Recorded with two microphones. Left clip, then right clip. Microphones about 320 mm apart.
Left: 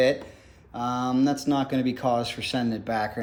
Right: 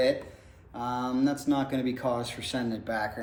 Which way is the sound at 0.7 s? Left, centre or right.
Centre.